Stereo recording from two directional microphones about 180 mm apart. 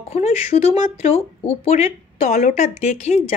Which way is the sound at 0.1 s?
35° left (ahead or behind).